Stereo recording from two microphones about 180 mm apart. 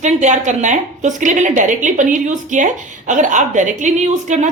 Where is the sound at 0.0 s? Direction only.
40° right (ahead or behind).